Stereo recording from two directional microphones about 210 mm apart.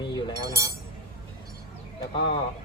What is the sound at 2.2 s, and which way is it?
Speech, 25° left (ahead or behind).